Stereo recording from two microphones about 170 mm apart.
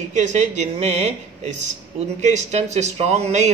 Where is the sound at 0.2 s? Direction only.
45° right (ahead or behind).